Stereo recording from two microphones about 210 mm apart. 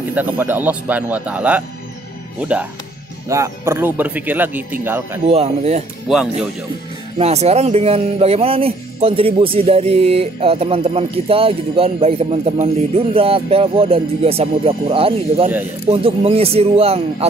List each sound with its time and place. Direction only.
0.1 s speech: 10° right (ahead or behind)
5.3 s speech: 30° right (ahead or behind)
7.2 s speech: 30° right (ahead or behind)